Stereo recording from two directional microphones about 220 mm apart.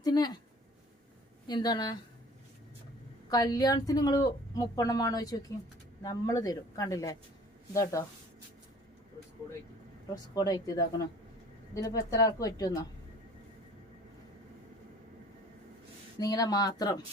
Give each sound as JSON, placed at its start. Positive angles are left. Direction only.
{"t": 0.0, "sound": "speech", "side_deg": 20}
{"t": 1.5, "sound": "speech", "side_deg": 20}
{"t": 3.2, "sound": "a woman's voice", "side_deg": 15}
{"t": 10.3, "sound": "a woman's voice", "side_deg": 15}
{"t": 16.1, "sound": "a woman's voice", "side_deg": 15}